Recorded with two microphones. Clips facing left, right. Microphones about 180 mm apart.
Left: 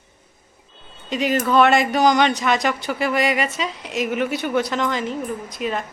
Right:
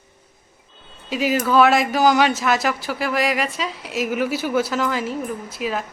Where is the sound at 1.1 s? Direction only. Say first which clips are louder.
Even; 5° right (ahead or behind).